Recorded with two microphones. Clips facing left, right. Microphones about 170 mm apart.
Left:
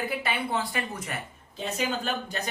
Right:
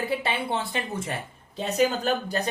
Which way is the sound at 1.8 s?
40° right (ahead or behind).